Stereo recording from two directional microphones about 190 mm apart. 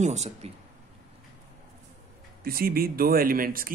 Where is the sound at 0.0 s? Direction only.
35° right (ahead or behind).